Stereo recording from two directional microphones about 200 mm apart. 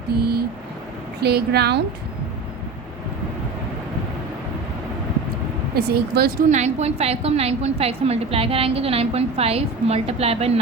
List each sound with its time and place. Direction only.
0.2 s a sound: 50° right (ahead or behind)
1.2 s a woman's voice: 55° right (ahead or behind)
5.7 s speech: 50° right (ahead or behind)
6.5 s a woman's voice: 35° right (ahead or behind)